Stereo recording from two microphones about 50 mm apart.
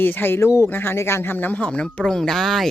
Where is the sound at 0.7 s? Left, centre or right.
Left.